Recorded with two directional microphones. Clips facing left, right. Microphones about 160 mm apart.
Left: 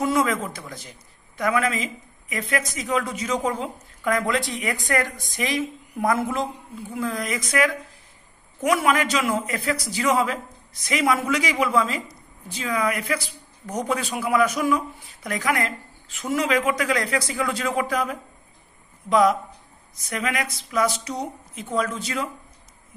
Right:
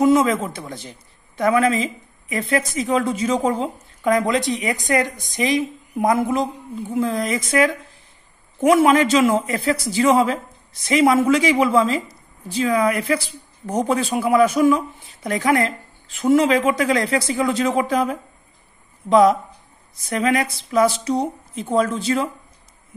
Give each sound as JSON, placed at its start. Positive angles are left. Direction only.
{"t": 0.0, "sound": "a man's voice", "side_deg": -20}